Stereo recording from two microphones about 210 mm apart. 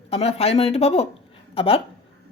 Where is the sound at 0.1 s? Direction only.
30° left (ahead or behind).